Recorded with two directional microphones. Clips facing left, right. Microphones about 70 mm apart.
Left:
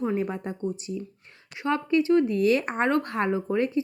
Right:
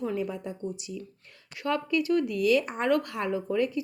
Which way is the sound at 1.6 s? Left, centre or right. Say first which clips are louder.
Left 4 dB; left.